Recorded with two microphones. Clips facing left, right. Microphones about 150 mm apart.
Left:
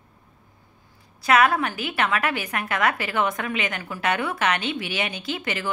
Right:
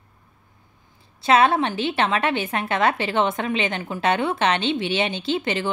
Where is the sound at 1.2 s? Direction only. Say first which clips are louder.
Right 2 dB; 25° right (ahead or behind).